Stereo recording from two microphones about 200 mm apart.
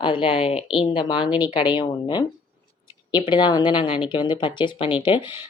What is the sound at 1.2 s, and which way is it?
Speech, 10° right (ahead or behind).